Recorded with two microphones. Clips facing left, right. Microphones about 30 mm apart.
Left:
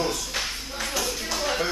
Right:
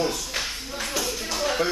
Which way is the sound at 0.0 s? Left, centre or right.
Centre.